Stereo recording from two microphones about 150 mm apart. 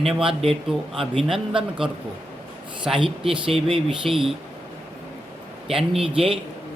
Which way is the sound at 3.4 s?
35° right (ahead or behind).